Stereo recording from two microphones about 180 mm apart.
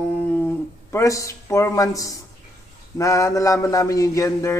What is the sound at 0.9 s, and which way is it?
A man's voice, 15° left (ahead or behind).